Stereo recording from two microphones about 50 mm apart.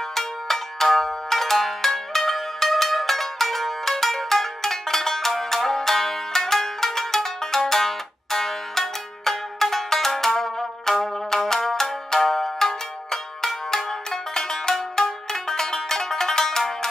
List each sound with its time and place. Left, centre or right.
0.1 s music: centre